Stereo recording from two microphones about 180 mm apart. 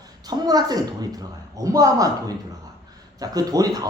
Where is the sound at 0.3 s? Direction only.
20° right (ahead or behind).